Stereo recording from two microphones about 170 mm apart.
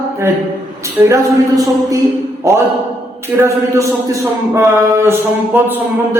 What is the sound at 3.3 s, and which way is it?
Speech, 15° right (ahead or behind).